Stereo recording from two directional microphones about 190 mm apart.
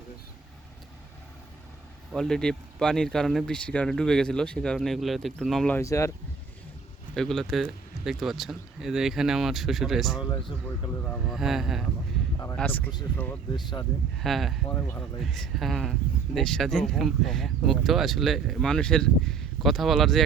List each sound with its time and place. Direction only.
2.1 s speech: 5° left (ahead or behind)
5.8 s speech: 15° left (ahead or behind)
7.1 s speech: centre (ahead or behind)
12.5 s speech: 10° left (ahead or behind)
13.5 s speech: 20° left (ahead or behind)
14.2 s speech: centre (ahead or behind)
14.7 s speech: 15° left (ahead or behind)
15.2 s speech: centre (ahead or behind)